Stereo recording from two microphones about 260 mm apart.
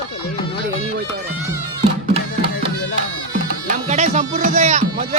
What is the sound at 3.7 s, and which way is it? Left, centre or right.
Speech, right.